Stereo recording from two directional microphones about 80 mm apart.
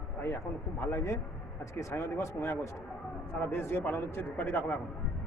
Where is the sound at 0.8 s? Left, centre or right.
Left.